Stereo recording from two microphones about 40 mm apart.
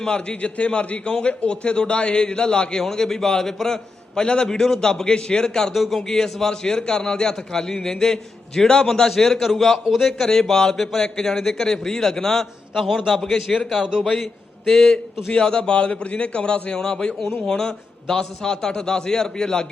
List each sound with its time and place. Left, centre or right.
0.0 s a man's voice: left
5.7 s a man's voice: centre
6.0 s a man's voice: centre
9.8 s a man's voice: centre
10.1 s a man's voice: centre
12.7 s a man's voice: centre
14.7 s a man's voice: centre
15.3 s a man's voice: left